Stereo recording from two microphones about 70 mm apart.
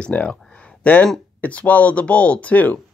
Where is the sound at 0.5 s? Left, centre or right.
Centre.